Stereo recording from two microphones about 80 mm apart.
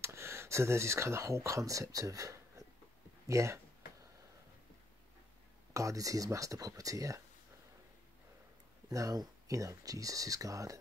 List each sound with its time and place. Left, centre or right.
0.0 s speech: right
5.7 s speech: right
8.9 s speech: right